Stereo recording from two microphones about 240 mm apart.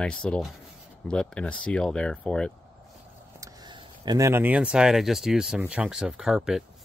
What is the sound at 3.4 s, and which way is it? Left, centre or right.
Speech, centre.